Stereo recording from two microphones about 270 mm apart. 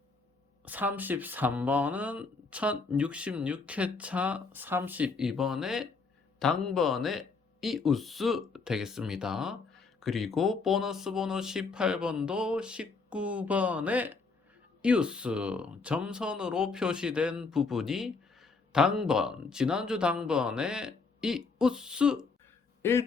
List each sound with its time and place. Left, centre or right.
0.6 s speech: centre
22.8 s speech: centre